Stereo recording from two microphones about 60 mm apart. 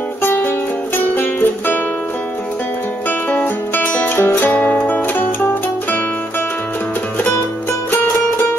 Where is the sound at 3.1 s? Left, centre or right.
Left.